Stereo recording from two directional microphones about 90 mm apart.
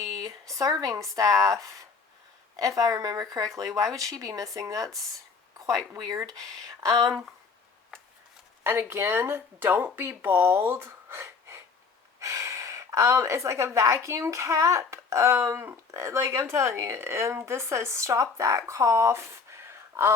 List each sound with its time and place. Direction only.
0.3 s speech: 40° right (ahead or behind)
2.6 s speech: 40° right (ahead or behind)
8.6 s speech: 25° right (ahead or behind)